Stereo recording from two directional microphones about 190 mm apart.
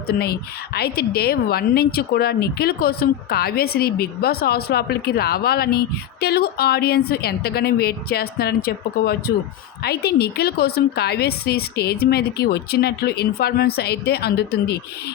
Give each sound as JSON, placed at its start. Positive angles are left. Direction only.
{"t": 0.1, "sound": "a woman's voice", "side_deg": 55}